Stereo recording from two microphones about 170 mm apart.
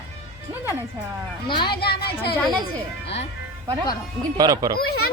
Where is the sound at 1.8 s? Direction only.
65° left (ahead or behind).